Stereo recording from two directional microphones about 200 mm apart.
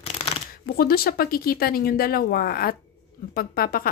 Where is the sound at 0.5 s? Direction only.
50° left (ahead or behind).